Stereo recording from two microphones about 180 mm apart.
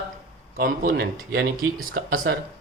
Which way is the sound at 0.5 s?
50° right (ahead or behind).